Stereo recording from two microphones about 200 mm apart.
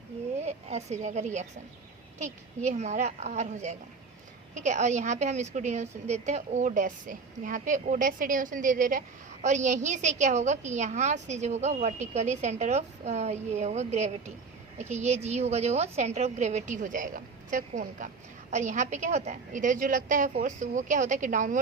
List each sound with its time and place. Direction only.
0.3 s a woman's voice: 35° right (ahead or behind)